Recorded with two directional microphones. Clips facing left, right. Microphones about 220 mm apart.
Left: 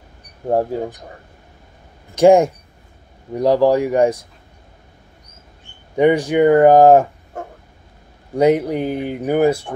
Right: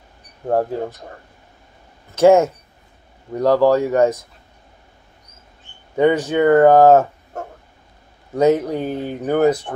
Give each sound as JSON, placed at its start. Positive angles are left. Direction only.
{"t": 2.1, "sound": "speech", "side_deg": 15}
{"t": 5.9, "sound": "speech", "side_deg": 15}
{"t": 8.4, "sound": "speech", "side_deg": 10}